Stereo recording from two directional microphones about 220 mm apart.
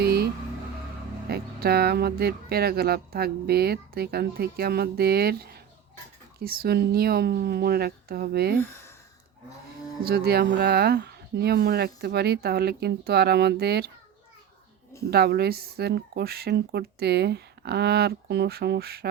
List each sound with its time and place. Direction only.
0.0 s vehicle: 45° right (ahead or behind)
1.3 s speech: 45° right (ahead or behind)
10.0 s speech: 45° right (ahead or behind)
15.1 s speech: 45° right (ahead or behind)